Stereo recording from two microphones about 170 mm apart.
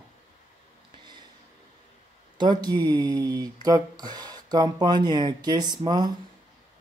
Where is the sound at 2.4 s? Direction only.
25° right (ahead or behind).